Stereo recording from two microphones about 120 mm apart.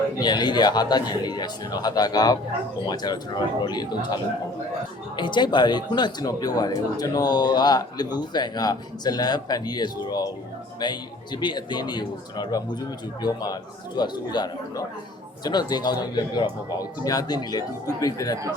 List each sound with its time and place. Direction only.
0.2 s speech: 35° left (ahead or behind)